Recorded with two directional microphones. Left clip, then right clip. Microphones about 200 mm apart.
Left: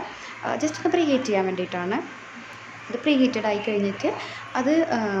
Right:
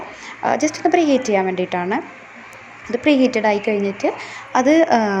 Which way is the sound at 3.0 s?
20° right (ahead or behind).